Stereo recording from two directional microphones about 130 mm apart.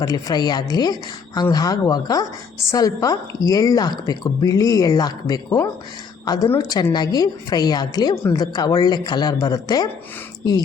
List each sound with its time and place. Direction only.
0.0 s a woman's voice: 30° left (ahead or behind)